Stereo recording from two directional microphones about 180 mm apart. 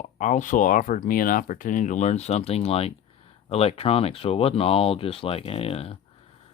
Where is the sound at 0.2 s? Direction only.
40° left (ahead or behind).